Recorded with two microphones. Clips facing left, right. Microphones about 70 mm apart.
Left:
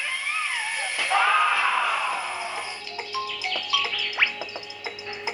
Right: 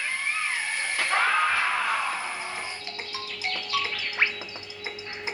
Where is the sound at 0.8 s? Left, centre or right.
Right.